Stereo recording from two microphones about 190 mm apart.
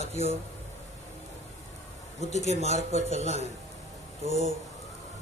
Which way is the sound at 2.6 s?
35° right (ahead or behind).